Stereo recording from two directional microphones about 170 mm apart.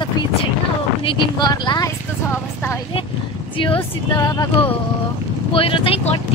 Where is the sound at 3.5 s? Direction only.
30° left (ahead or behind).